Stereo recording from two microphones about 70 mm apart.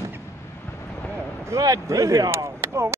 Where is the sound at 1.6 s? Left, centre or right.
Right.